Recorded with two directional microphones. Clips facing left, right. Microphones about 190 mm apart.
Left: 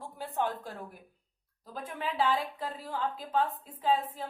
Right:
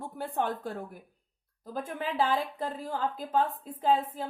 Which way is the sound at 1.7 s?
45° right (ahead or behind).